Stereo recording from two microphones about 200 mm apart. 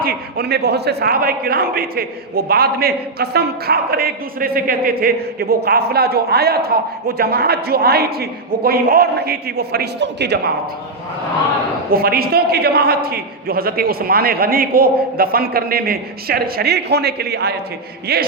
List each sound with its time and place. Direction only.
0.0 s a man's voice: 50° right (ahead or behind)
11.9 s a man's voice: 50° right (ahead or behind)